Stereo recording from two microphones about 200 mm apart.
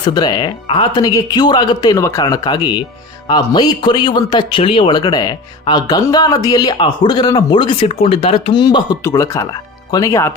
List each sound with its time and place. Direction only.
0.0 s speech: 20° left (ahead or behind)